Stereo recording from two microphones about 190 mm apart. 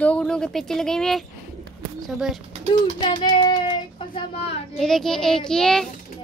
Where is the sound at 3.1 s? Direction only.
30° left (ahead or behind).